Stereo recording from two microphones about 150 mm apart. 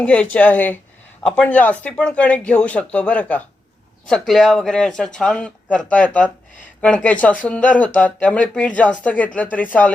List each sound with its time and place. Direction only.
0.0 s speech: 10° left (ahead or behind)